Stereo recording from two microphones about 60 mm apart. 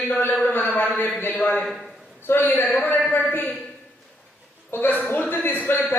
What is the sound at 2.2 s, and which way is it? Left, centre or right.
Speech, left.